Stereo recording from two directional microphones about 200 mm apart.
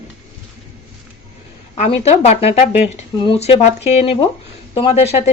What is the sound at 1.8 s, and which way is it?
Speech, 30° left (ahead or behind).